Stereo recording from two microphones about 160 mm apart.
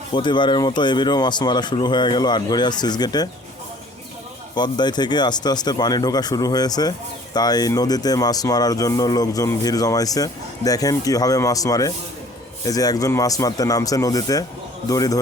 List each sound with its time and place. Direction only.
0.1 s speech: 30° left (ahead or behind)
4.5 s speech: 25° left (ahead or behind)